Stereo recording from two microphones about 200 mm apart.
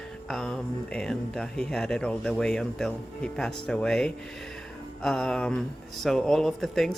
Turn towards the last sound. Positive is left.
turn(degrees=0)  # may be behind; listen again after turning